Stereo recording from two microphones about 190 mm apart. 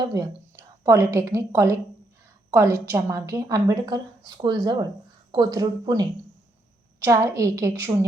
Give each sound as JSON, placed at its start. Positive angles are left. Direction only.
{"t": 0.0, "sound": "a woman's voice", "side_deg": -20}